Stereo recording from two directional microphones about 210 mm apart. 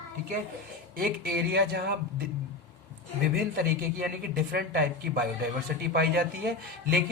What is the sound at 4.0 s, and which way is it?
Speech, 45° right (ahead or behind).